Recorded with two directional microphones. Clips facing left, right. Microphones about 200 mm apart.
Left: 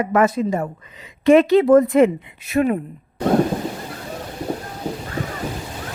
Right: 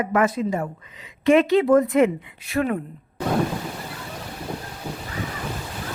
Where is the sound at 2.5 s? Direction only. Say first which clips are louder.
Left 5 dB; 20° left (ahead or behind).